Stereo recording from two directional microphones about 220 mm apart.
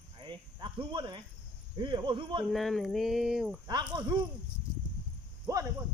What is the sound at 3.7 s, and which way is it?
Speech, 20° right (ahead or behind).